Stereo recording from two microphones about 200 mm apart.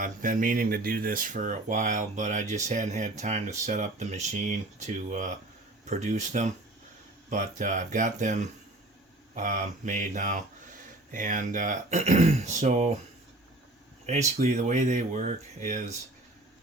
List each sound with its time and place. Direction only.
0.0 s speech: 40° right (ahead or behind)
14.1 s speech: 35° right (ahead or behind)